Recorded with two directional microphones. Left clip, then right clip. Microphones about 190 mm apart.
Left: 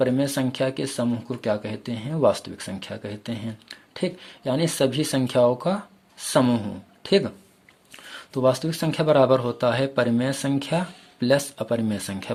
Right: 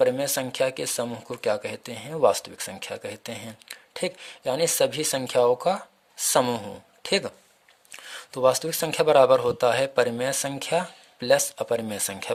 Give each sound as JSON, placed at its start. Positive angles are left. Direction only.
{"t": 0.0, "sound": "speech", "side_deg": -35}